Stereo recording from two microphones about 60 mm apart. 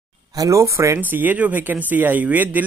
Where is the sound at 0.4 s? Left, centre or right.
Right.